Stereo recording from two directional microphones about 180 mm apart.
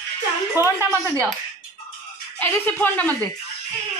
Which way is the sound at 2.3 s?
10° left (ahead or behind).